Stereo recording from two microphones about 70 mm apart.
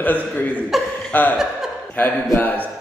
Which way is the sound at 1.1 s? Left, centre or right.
Left.